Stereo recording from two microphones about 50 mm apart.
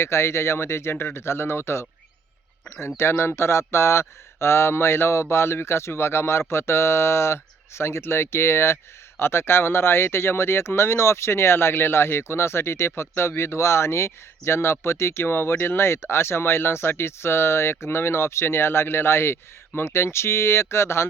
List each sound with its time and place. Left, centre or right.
0.0 s speech: left
3.0 s speech: left